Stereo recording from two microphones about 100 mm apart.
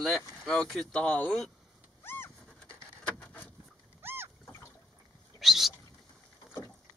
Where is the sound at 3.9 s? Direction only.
25° right (ahead or behind).